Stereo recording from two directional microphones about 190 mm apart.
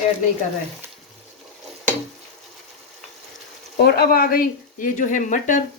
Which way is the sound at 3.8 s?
55° left (ahead or behind).